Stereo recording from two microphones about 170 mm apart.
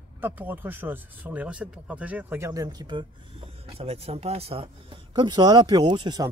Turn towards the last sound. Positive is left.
turn(degrees=-25)  # may be behind; listen again after turning